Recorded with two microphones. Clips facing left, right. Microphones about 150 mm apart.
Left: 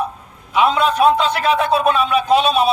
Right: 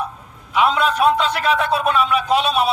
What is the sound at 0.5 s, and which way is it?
A man's voice, 25° left (ahead or behind).